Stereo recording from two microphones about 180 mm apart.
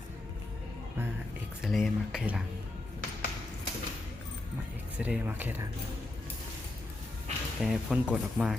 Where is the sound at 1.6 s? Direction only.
Centre (ahead or behind).